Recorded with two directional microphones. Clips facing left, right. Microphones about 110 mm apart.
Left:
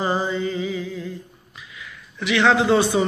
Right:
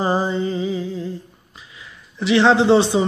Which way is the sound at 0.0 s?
35° right (ahead or behind).